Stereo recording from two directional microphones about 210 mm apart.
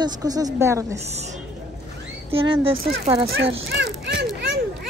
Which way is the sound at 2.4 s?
25° right (ahead or behind).